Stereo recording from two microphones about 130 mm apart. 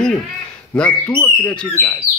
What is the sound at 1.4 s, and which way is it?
Speech, 15° left (ahead or behind).